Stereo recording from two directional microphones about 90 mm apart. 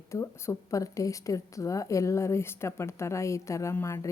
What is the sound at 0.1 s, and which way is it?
Speech, 35° left (ahead or behind).